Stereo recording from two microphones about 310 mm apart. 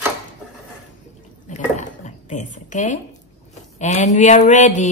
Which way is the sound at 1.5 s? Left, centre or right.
Left.